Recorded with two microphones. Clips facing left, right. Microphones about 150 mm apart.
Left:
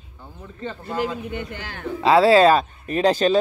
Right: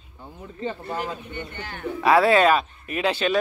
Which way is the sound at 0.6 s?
20° right (ahead or behind).